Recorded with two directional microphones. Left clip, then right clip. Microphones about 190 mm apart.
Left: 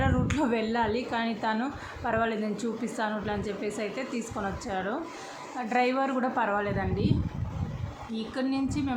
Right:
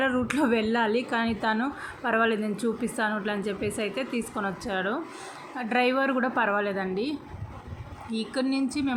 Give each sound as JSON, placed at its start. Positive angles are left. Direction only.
{"t": 0.0, "sound": "a woman's voice", "side_deg": -15}
{"t": 8.1, "sound": "a woman's voice", "side_deg": -15}